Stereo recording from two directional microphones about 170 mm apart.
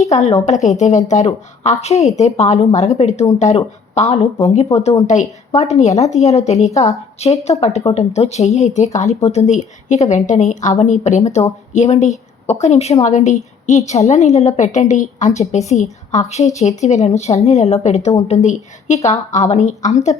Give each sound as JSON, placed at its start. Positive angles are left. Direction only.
{"t": 0.1, "sound": "a woman's voice", "side_deg": 40}